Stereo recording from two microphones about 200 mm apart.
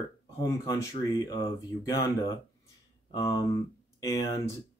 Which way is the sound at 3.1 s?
15° left (ahead or behind).